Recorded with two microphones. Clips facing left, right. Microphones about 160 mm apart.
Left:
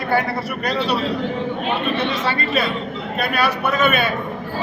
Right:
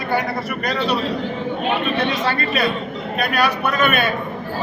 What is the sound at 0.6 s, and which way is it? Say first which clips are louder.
Speech: even; 10° left (ahead or behind).